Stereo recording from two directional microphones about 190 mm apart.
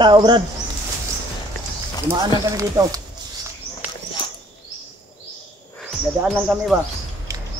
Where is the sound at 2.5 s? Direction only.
15° right (ahead or behind).